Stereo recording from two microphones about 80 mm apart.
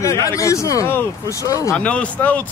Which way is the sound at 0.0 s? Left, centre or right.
Left.